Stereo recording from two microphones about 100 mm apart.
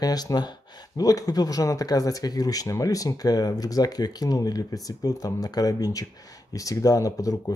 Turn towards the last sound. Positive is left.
turn(degrees=35)  # may be behind; listen again after turning